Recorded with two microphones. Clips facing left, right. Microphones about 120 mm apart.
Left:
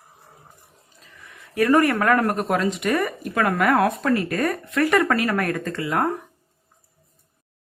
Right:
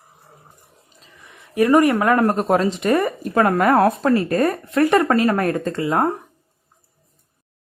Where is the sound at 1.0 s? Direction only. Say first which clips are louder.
Even; 20° right (ahead or behind).